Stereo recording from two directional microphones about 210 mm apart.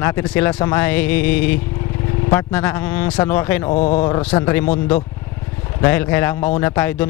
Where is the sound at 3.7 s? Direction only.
30° left (ahead or behind).